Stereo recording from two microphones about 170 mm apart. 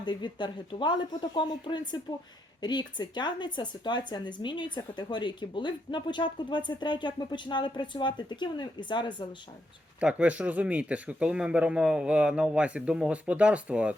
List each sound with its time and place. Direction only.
0.0 s speech: 25° left (ahead or behind)
10.0 s speech: 5° right (ahead or behind)